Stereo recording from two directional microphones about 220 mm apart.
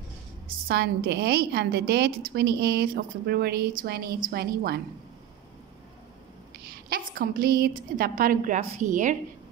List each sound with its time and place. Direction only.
0.7 s a woman's voice: 45° right (ahead or behind)
6.5 s a woman's voice: 45° right (ahead or behind)